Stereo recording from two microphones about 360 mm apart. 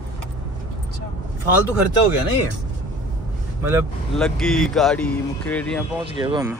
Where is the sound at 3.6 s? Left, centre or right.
Centre.